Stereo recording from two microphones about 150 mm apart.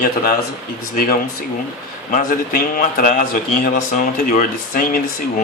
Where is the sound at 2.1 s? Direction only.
65° left (ahead or behind).